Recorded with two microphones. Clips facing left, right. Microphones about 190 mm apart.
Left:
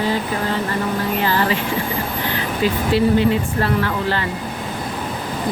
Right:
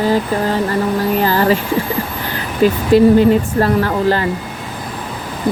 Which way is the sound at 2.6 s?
45° right (ahead or behind).